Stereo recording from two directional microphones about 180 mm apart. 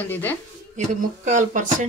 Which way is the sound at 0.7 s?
45° right (ahead or behind).